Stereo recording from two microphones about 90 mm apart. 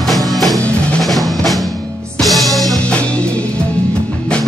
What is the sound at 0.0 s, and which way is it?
Music, centre (ahead or behind).